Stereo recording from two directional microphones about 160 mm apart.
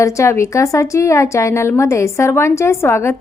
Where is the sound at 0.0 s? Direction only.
20° left (ahead or behind).